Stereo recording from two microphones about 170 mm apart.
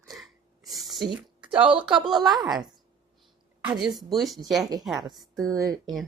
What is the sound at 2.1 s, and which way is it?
Speech, centre (ahead or behind).